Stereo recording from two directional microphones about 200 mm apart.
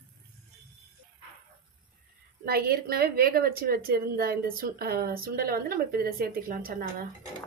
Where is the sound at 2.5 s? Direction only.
50° right (ahead or behind).